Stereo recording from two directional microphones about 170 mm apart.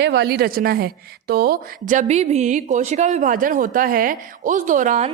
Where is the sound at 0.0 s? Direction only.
80° right; by 5.0 s 50° right (ahead or behind).